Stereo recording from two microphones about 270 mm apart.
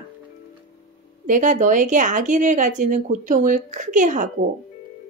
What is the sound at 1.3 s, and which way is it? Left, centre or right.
Speech, right.